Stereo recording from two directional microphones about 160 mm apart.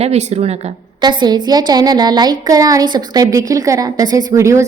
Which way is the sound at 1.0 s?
30° right (ahead or behind).